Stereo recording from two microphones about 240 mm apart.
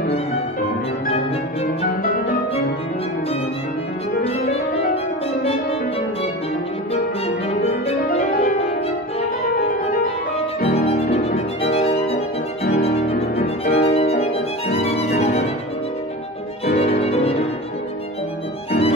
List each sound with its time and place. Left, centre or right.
1.1 s music: left
4.2 s music: left
7.4 s music: left
10.7 s violin: left
13.4 s violin: left
16.7 s violin: left
18.7 s violin: left